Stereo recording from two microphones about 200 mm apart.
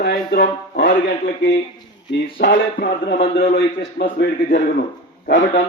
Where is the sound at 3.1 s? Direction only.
50° left (ahead or behind).